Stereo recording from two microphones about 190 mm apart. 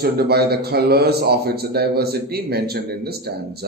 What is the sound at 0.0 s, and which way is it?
A man's voice, 55° right (ahead or behind).